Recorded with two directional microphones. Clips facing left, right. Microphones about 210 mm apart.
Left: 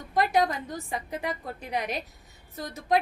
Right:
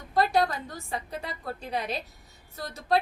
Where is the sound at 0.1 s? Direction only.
15° left (ahead or behind).